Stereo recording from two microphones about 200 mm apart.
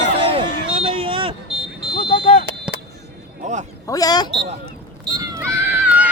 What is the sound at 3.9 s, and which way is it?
Speech, 20° left (ahead or behind).